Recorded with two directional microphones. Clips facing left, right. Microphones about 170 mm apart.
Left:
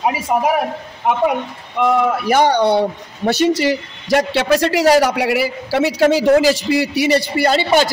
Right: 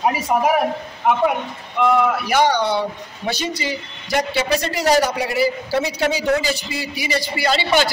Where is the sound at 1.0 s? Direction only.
20° left (ahead or behind).